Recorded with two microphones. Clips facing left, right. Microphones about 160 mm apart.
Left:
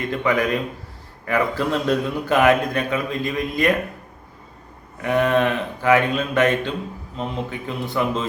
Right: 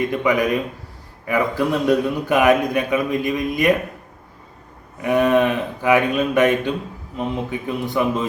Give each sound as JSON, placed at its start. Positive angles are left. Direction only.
{"t": 0.1, "sound": "speech", "side_deg": -15}
{"t": 5.0, "sound": "speech", "side_deg": -15}